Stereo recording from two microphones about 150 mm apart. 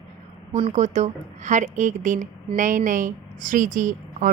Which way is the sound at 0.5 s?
45° right (ahead or behind).